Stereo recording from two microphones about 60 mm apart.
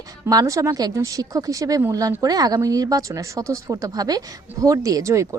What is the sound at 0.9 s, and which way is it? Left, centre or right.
A woman's voice, right.